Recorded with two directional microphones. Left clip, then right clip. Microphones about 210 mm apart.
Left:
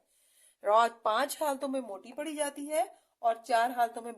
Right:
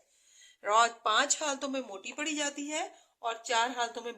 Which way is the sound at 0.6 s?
60° left (ahead or behind).